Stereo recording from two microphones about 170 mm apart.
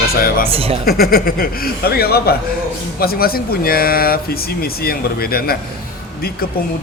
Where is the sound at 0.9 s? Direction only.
65° left (ahead or behind).